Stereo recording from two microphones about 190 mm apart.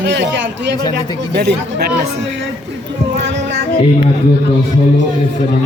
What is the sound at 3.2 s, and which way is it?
Music, 70° right (ahead or behind).